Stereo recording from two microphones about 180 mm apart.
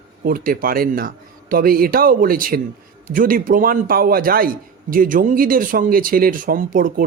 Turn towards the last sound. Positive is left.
turn(degrees=-50)  # may be behind; listen again after turning